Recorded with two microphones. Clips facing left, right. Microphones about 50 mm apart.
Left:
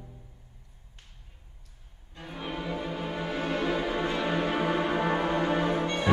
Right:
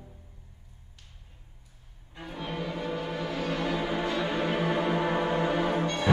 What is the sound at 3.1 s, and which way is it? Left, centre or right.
Music, left.